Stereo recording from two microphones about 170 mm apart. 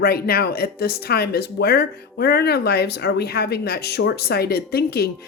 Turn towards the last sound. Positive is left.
turn(degrees=70)  # may be behind; listen again after turning